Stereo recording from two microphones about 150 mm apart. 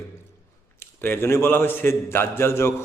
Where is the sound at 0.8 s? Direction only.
15° left (ahead or behind).